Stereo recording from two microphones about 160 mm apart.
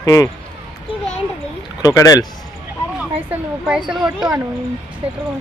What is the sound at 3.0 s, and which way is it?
Speech, 5° right (ahead or behind).